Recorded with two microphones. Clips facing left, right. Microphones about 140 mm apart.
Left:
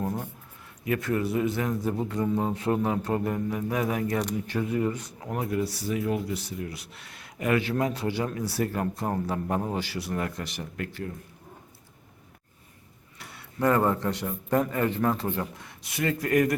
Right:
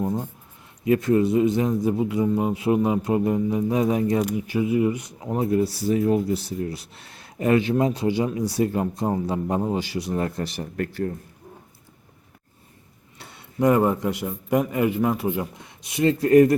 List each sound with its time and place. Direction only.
0.9 s a man's voice: 25° right (ahead or behind)
4.2 s a man's voice: 5° right (ahead or behind)
10.2 s speech: 30° right (ahead or behind)
13.1 s a man's voice: 20° right (ahead or behind)